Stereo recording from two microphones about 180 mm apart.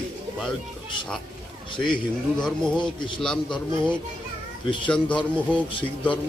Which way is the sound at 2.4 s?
5° left (ahead or behind).